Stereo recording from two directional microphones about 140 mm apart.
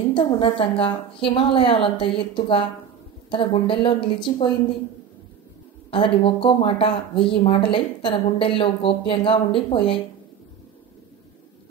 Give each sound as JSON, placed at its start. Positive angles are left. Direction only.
{"t": 0.1, "sound": "speech", "side_deg": 40}
{"t": 5.9, "sound": "speech", "side_deg": 40}